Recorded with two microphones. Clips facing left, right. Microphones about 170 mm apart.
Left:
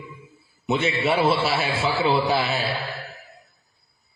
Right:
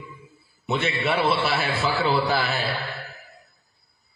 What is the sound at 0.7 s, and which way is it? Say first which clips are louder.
A man's voice: left 2 dB; 30° left (ahead or behind).